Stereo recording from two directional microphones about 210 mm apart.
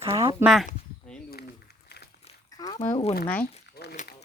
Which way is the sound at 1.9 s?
50° left (ahead or behind).